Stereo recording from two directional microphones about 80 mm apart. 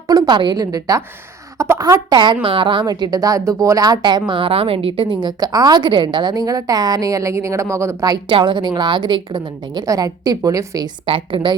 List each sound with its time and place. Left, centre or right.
0.3 s a woman's voice: right
1.5 s a woman's voice: right
1.8 s a woman's voice: right
2.8 s a woman's voice: right
4.3 s a woman's voice: right
5.2 s a woman's voice: right
6.3 s a woman's voice: right
8.3 s a woman's voice: right
9.8 s a woman's voice: right
11.0 s a woman's voice: right